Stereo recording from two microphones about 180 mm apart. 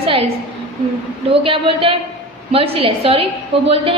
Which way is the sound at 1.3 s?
30° right (ahead or behind).